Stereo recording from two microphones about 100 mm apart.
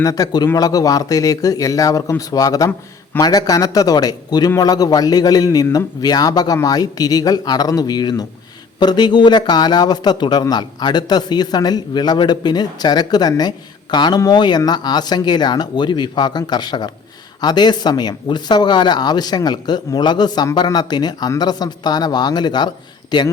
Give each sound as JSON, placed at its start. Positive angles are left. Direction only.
{"t": 0.0, "sound": "speech", "side_deg": 35}